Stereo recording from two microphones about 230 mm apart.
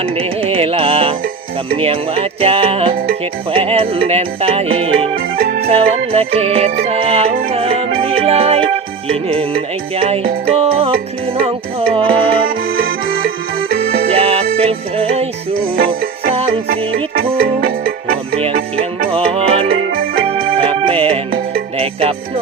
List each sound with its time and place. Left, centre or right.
0.0 s music: right
5.4 s music: right
5.6 s music: right
11.9 s music: right
12.7 s music: right
14.1 s music: right
17.4 s music: right
19.1 s music: right